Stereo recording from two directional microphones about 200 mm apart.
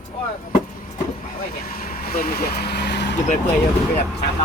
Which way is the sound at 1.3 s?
50° left (ahead or behind).